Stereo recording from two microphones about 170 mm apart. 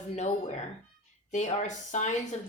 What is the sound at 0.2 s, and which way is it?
Speech, 40° left (ahead or behind).